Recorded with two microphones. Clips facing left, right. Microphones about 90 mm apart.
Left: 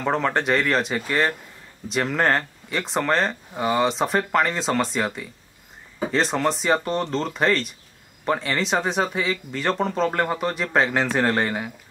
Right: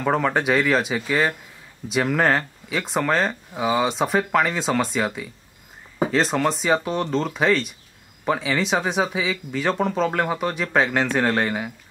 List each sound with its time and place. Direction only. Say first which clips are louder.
0.0 s speech: right 1 dB; 5° right (ahead or behind)